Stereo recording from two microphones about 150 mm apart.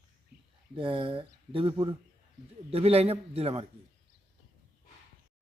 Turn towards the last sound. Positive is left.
turn(degrees=-40)  # may be behind; listen again after turning